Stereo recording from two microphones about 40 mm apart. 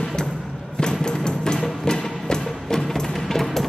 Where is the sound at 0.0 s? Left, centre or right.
Centre.